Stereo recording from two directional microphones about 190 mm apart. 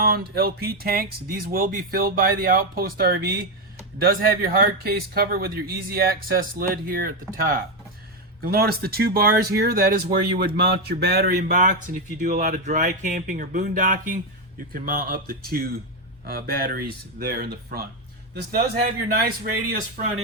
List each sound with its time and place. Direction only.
0.0 s speech: 50° right (ahead or behind)